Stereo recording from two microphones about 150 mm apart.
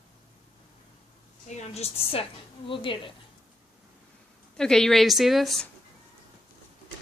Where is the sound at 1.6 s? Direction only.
45° left (ahead or behind).